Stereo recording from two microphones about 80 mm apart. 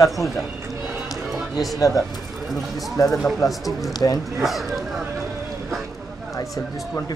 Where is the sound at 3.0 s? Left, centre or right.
Left.